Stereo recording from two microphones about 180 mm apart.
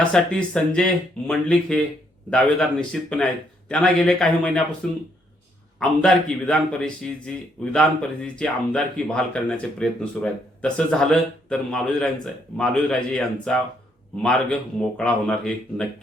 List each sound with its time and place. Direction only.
0.0 s a man's voice: 5° left (ahead or behind)
14.8 s a man's voice: 5° left (ahead or behind)